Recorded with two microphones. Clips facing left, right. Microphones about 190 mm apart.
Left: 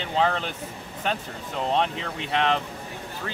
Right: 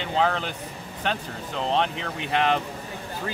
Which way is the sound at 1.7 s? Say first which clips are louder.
Even; centre (ahead or behind).